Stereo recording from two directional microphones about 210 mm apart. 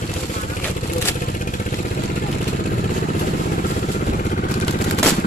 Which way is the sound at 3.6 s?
45° left (ahead or behind).